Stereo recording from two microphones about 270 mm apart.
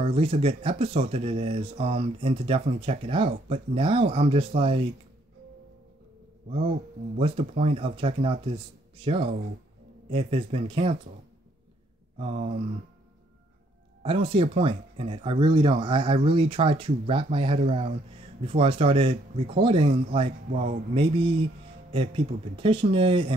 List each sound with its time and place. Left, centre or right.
0.0 s speech: centre
7.2 s speech: right
12.2 s speech: right
14.0 s speech: centre